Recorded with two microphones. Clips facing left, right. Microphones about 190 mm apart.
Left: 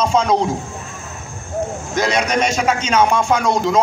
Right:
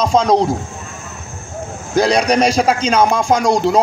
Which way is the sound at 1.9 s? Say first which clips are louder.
Right 5 dB; 35° right (ahead or behind).